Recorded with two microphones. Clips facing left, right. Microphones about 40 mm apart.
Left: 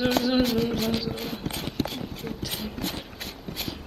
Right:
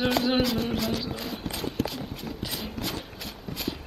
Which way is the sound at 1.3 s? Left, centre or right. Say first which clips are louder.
Even; left.